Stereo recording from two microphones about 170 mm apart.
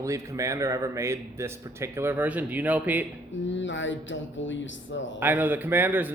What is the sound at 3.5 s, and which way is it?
Speech, 90° left.